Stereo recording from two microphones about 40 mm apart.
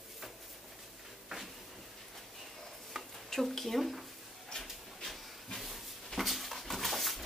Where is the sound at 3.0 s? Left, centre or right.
Centre.